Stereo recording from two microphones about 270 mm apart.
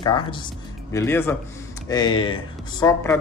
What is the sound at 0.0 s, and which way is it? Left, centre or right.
Speech, centre.